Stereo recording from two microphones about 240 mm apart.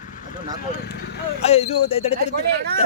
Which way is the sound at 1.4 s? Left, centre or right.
Left.